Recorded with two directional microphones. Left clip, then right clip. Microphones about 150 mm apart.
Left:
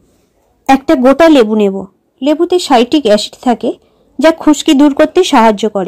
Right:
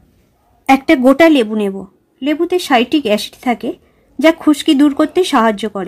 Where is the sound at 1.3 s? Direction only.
25° left (ahead or behind).